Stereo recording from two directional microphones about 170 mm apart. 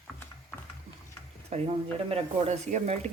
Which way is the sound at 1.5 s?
35° right (ahead or behind).